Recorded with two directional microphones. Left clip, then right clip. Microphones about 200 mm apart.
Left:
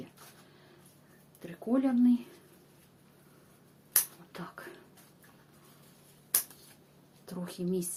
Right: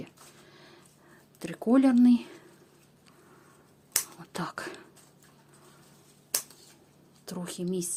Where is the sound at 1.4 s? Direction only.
60° right (ahead or behind).